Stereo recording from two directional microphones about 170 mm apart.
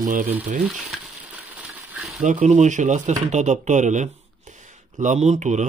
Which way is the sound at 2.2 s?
45° right (ahead or behind).